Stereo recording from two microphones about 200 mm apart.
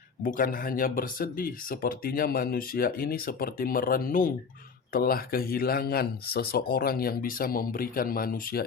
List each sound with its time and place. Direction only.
0.2 s speech: 45° left (ahead or behind)